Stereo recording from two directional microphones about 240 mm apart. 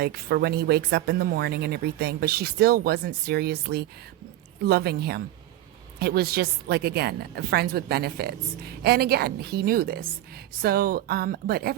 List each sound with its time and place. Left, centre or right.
0.0 s a woman's voice: right